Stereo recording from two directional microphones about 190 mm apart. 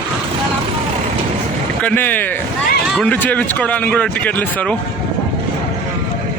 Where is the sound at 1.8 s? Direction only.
10° left (ahead or behind).